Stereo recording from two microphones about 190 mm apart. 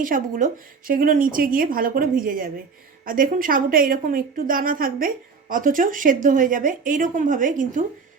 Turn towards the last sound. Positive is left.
turn(degrees=-45)  # may be behind; listen again after turning